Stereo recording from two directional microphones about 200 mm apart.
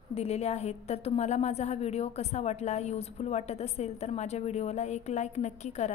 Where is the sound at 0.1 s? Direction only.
30° left (ahead or behind).